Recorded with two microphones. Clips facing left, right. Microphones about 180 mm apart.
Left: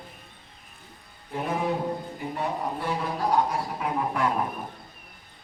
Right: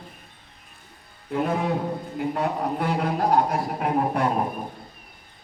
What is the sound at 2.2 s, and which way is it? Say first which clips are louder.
A man's voice: right 8 dB; 70° right (ahead or behind).